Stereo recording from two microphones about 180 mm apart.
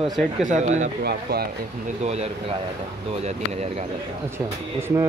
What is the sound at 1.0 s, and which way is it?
Speech, 60° right (ahead or behind).